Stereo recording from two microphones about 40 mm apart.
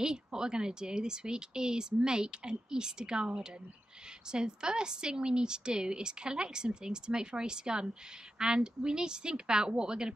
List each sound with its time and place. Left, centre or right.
0.0 s a woman's voice: centre